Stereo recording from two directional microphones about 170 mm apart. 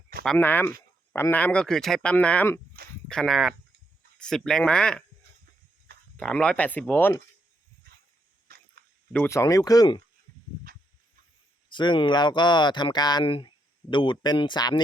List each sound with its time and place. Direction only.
0.3 s speech: 10° left (ahead or behind)
6.1 s speech: 5° left (ahead or behind)
8.5 s a sound: 65° right (ahead or behind)
9.1 s speech: 15° left (ahead or behind)
10.7 s a sound: 55° right (ahead or behind)
11.7 s speech: 25° left (ahead or behind)